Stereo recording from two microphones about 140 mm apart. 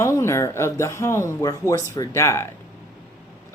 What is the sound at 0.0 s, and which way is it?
Speech, 20° left (ahead or behind).